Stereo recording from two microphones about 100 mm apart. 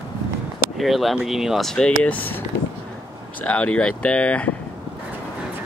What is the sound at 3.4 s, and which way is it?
Speech, 15° left (ahead or behind).